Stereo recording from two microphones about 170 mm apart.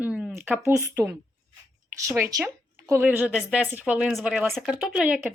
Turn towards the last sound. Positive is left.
turn(degrees=-5)  # may be behind; listen again after turning